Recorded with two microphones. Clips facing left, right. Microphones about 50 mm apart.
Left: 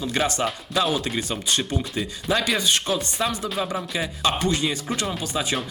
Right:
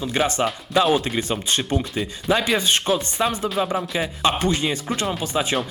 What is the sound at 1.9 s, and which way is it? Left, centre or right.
Speech, centre.